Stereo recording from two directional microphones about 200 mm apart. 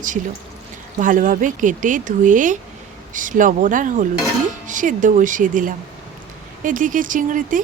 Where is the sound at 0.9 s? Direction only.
40° right (ahead or behind).